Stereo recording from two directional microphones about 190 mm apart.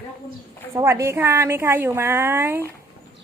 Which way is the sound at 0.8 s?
15° right (ahead or behind).